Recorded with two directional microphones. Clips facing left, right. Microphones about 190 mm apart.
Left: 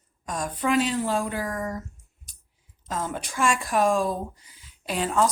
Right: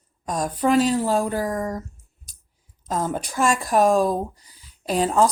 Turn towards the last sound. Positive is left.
turn(degrees=-35)  # may be behind; listen again after turning